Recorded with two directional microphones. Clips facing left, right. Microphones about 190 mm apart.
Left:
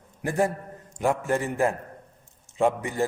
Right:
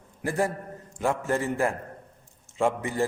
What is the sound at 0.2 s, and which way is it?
A man's voice, 20° left (ahead or behind).